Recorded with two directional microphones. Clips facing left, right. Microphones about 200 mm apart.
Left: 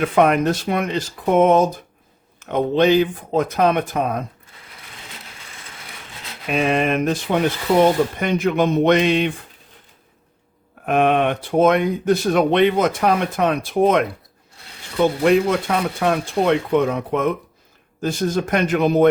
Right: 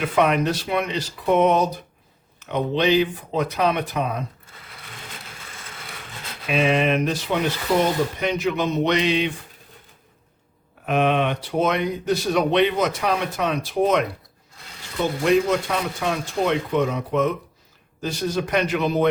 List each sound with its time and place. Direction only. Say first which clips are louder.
0.0 s speech: left 4 dB; 50° left (ahead or behind)
6.5 s speech: left 1 dB; 45° left (ahead or behind)
10.8 s speech: left 3 dB; 50° left (ahead or behind)
15.2 s speech: even; 55° left (ahead or behind)